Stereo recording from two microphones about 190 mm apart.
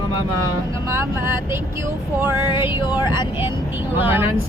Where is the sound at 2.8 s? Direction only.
20° left (ahead or behind).